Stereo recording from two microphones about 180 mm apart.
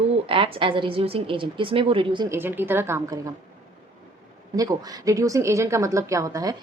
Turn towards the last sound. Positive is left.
turn(degrees=-20)  # may be behind; listen again after turning